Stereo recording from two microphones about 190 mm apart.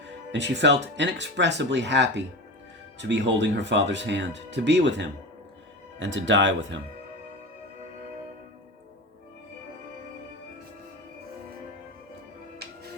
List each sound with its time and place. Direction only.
0.3 s speech: 70° right (ahead or behind)